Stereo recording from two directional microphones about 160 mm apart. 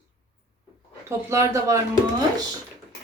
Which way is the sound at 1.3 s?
20° right (ahead or behind).